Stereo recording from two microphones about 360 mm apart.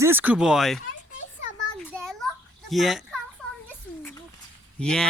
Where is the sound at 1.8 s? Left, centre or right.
Centre.